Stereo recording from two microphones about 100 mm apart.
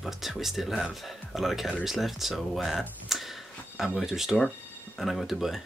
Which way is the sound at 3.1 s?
Centre (ahead or behind).